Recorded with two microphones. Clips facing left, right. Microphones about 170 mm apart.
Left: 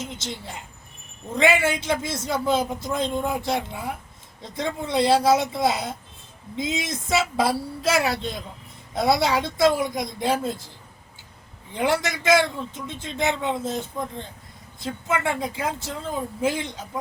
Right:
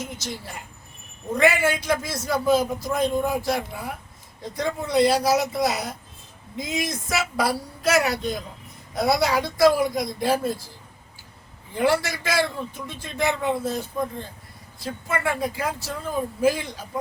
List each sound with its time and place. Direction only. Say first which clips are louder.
0.0 s a woman's voice: even; 25° left (ahead or behind)
11.7 s a man's voice: right 2 dB; 20° left (ahead or behind)
15.1 s a man's voice: even; 20° left (ahead or behind)